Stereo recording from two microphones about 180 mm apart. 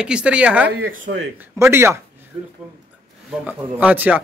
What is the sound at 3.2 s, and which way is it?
Speech, 10° right (ahead or behind).